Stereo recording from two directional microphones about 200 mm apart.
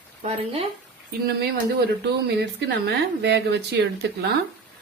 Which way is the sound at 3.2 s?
60° right (ahead or behind).